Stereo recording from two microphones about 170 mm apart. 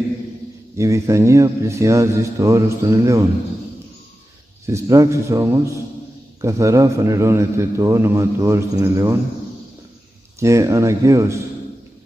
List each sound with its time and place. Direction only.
0.7 s a man's voice: 15° right (ahead or behind)
4.6 s a man's voice: 20° right (ahead or behind)
10.4 s a man's voice: 15° right (ahead or behind)